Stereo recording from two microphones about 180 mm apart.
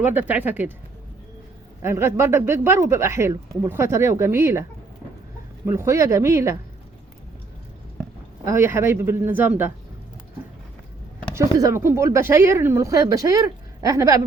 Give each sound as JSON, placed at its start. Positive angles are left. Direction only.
{"t": 0.0, "sound": "speech", "side_deg": -10}
{"t": 1.8, "sound": "speech", "side_deg": -15}
{"t": 5.6, "sound": "speech", "side_deg": -15}
{"t": 8.4, "sound": "speech", "side_deg": -15}
{"t": 11.3, "sound": "speech", "side_deg": -15}